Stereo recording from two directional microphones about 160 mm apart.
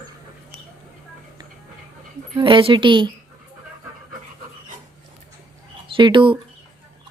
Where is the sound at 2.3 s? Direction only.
35° right (ahead or behind).